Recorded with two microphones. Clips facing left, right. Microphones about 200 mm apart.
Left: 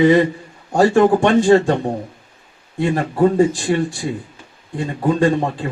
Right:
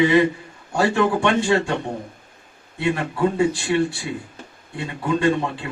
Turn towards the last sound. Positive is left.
turn(degrees=40)  # may be behind; listen again after turning